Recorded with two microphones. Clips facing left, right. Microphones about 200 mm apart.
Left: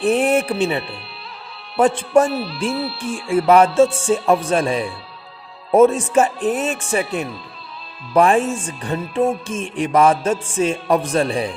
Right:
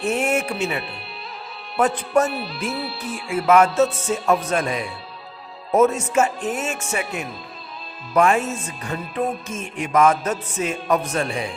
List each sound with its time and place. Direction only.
0.0 s speech: 35° left (ahead or behind)